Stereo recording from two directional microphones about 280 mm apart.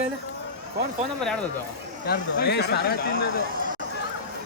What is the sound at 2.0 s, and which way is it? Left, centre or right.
Speech, left.